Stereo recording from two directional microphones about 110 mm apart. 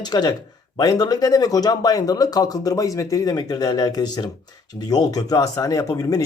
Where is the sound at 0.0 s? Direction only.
40° left (ahead or behind).